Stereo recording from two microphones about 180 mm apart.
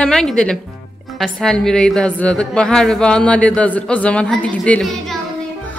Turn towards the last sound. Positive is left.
turn(degrees=5)  # may be behind; listen again after turning